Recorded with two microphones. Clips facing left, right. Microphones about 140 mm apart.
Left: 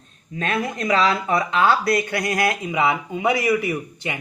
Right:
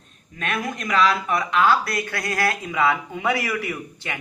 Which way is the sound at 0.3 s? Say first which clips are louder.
Left 3 dB; 30° left (ahead or behind).